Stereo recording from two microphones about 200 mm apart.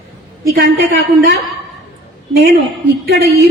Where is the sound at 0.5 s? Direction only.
50° right (ahead or behind).